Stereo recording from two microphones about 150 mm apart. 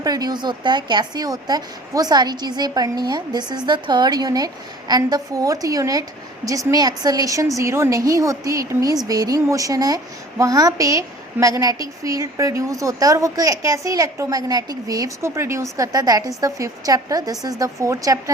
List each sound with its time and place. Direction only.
0.0 s a woman's voice: 25° right (ahead or behind)